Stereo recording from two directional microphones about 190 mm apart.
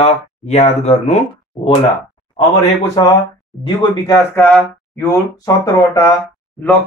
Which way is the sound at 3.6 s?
25° left (ahead or behind).